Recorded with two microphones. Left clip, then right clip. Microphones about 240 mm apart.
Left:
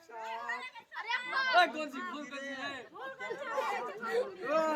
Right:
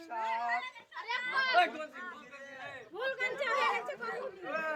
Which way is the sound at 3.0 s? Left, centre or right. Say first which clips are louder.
Right 8 dB; right.